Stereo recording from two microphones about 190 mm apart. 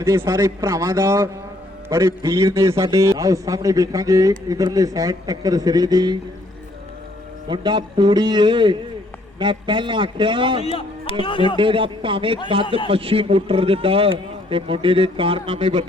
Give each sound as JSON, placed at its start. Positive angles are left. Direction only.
{"t": 0.0, "sound": "a man's voice", "side_deg": -15}
{"t": 7.4, "sound": "a man's voice", "side_deg": -25}
{"t": 10.6, "sound": "a man's voice", "side_deg": 30}
{"t": 11.5, "sound": "a man's voice", "side_deg": -25}